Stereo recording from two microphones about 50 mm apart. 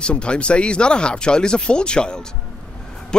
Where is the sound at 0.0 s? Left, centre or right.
Left.